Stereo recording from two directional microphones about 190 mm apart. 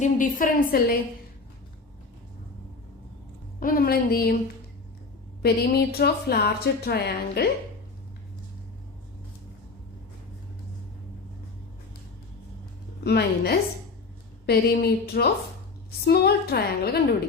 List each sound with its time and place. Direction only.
0.0 s a woman's voice: 45° left (ahead or behind)
3.6 s a woman's voice: 50° left (ahead or behind)
5.4 s a woman's voice: 55° left (ahead or behind)
13.1 s a woman's voice: 55° left (ahead or behind)